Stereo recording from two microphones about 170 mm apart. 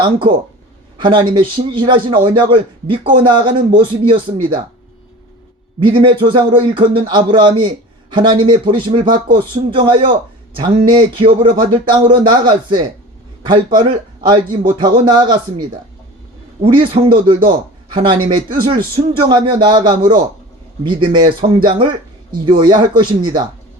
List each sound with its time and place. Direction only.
0.0 s a man's voice: 30° right (ahead or behind)
5.8 s a man's voice: 30° right (ahead or behind)